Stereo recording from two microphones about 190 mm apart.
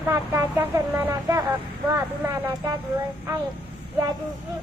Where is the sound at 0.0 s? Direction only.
15° right (ahead or behind).